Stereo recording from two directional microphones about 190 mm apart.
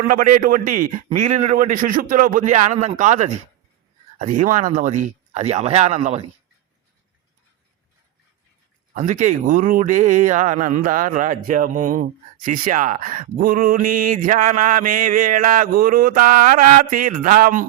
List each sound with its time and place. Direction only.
0.0 s speech: 45° right (ahead or behind)
9.0 s speech: 40° right (ahead or behind)